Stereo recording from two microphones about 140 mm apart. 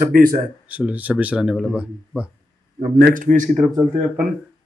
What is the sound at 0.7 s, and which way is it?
Speech, 10° right (ahead or behind).